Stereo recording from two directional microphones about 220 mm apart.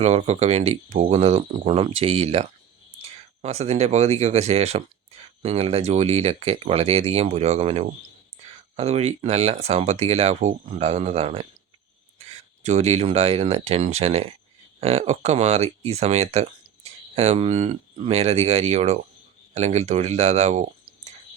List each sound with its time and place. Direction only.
0.0 s speech: 30° right (ahead or behind)
12.6 s speech: 30° right (ahead or behind)